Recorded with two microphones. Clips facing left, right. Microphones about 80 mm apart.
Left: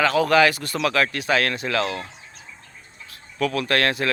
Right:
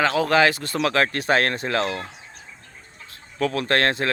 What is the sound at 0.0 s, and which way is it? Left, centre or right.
Speech, right.